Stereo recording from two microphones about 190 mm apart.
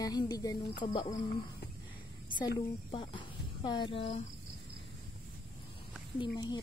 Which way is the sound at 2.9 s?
25° left (ahead or behind).